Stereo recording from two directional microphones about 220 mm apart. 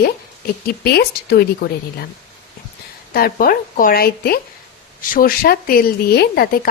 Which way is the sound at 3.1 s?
40° left (ahead or behind).